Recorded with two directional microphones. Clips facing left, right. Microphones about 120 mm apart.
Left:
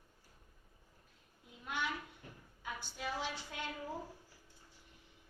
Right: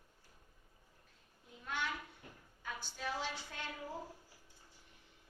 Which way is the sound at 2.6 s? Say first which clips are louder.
Even; 15° left (ahead or behind).